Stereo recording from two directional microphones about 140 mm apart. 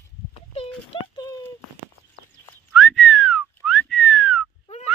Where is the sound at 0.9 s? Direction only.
35° left (ahead or behind).